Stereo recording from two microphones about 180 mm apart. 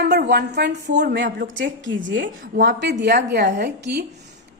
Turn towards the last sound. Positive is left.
turn(degrees=-70)  # may be behind; listen again after turning